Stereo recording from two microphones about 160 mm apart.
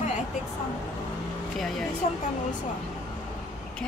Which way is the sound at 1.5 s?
Centre (ahead or behind).